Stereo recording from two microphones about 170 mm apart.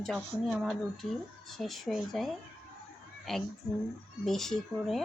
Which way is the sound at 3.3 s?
5° left (ahead or behind).